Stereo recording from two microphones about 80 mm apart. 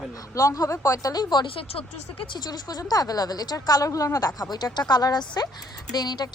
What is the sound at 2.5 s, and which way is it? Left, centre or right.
Speech, left.